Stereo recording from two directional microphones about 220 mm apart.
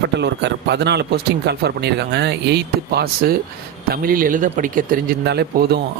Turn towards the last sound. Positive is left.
turn(degrees=-50)  # may be behind; listen again after turning